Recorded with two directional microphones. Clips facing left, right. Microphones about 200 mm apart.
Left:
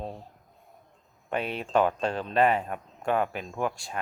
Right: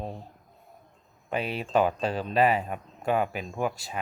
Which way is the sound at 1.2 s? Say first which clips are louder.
Even; 5° right (ahead or behind).